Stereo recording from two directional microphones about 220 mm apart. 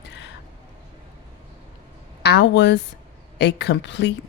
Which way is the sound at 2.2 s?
50° left (ahead or behind).